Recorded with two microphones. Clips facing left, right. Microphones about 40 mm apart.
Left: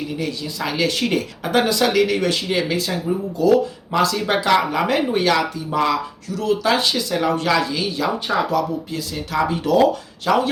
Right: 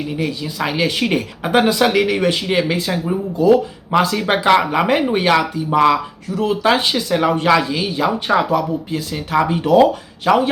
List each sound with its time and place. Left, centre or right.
0.2 s speech: right